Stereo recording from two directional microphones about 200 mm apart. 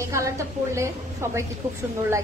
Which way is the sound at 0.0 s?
15° right (ahead or behind).